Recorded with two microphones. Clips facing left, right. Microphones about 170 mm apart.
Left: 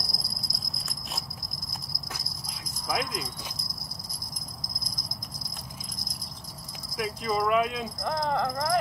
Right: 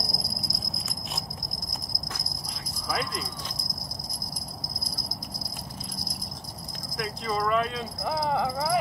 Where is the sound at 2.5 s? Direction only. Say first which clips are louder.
Left 1 dB; 10° left (ahead or behind).